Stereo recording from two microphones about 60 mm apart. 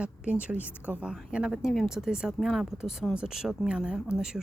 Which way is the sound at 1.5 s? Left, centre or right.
Centre.